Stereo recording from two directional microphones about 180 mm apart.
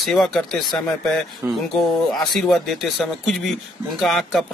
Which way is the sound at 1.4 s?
10° right (ahead or behind).